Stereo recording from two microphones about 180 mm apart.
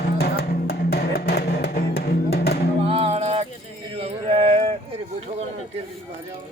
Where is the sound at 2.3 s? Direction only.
60° left (ahead or behind).